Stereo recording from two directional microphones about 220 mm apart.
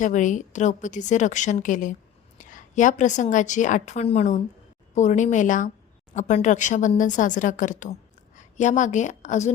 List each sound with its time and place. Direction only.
0.0 s a woman's voice: 35° left (ahead or behind)